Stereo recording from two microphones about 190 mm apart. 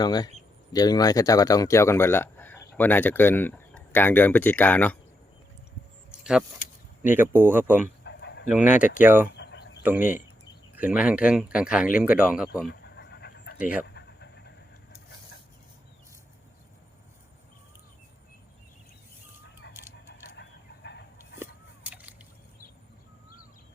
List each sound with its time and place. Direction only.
0.0 s speech: 20° left (ahead or behind)
6.1 s a sound: 5° right (ahead or behind)
7.0 s speech: 10° right (ahead or behind)
8.0 s dog: 65° left (ahead or behind)
8.4 s speech: 5° right (ahead or behind)
9.3 s bird: 65° left (ahead or behind)
10.8 s speech: 10° right (ahead or behind)
12.6 s pant: 60° left (ahead or behind)
13.6 s speech: 5° right (ahead or behind)
13.8 s vehicle: 65° left (ahead or behind)
19.6 s a sound: 60° left (ahead or behind)
20.3 s chicken: 65° left (ahead or behind)
21.8 s slosh: 10° right (ahead or behind)